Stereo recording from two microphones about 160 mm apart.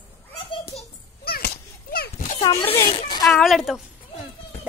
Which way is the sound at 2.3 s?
35° left (ahead or behind).